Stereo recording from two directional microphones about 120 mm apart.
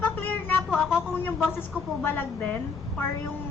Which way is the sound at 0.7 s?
5° right (ahead or behind).